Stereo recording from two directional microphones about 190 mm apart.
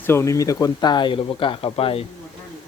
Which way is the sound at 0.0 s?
15° left (ahead or behind).